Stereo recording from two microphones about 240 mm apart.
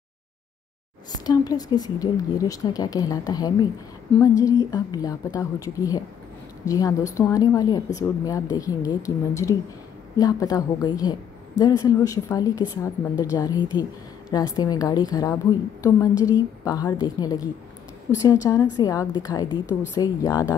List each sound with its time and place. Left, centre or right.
1.1 s a woman's voice: centre